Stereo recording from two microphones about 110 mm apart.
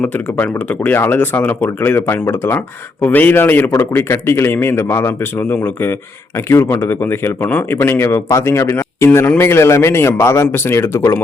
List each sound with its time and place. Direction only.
0.0 s a man's voice: 15° left (ahead or behind)